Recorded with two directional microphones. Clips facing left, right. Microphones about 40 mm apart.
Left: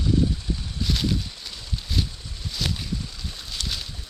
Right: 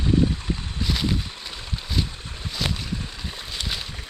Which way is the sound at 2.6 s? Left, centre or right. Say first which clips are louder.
Right 1 dB; centre.